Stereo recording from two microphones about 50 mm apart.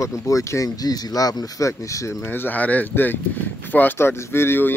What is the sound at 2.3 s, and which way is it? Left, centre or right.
Speech, left.